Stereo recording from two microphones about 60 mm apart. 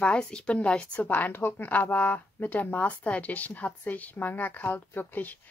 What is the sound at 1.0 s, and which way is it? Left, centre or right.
Speech, left.